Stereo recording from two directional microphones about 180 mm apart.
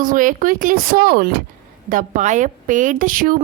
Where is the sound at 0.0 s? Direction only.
50° right (ahead or behind).